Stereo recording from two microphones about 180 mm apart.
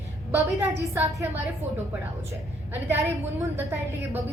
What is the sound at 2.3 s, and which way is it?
A woman's voice, 10° right (ahead or behind).